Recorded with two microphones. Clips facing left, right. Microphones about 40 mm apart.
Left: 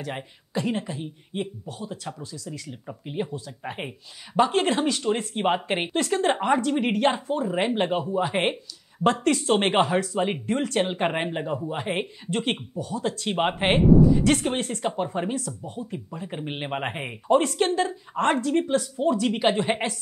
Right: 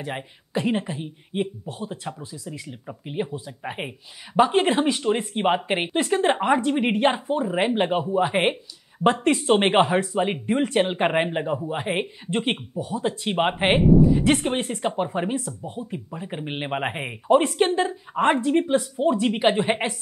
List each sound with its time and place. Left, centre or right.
0.6 s speech: right